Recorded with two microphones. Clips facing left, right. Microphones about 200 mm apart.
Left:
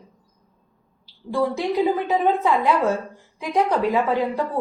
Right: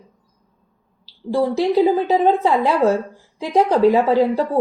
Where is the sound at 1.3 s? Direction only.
30° right (ahead or behind).